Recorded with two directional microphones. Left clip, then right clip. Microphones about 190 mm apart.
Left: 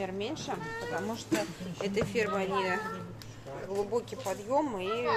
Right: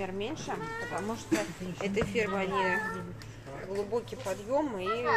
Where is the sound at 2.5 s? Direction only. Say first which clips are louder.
Right 2 dB; 55° left (ahead or behind).